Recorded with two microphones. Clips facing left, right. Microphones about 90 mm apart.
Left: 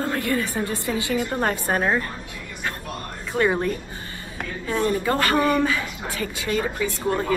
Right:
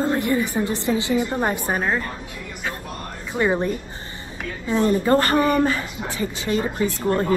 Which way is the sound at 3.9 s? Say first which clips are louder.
Even; 25° right (ahead or behind).